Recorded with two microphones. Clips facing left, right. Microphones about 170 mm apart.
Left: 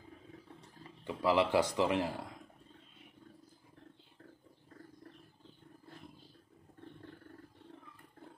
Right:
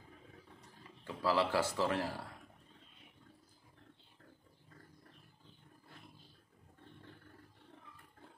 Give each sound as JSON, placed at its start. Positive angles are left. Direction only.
{"t": 0.6, "sound": "speech", "side_deg": 20}